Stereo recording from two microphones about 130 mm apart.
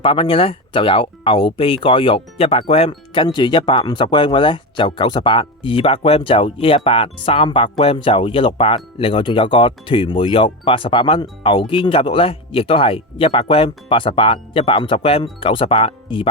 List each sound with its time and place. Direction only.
0.0 s speech: 45° left (ahead or behind)